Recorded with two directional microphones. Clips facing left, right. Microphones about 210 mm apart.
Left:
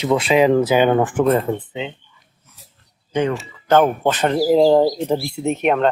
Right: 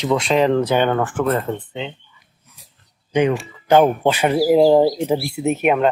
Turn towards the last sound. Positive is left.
turn(degrees=-5)  # may be behind; listen again after turning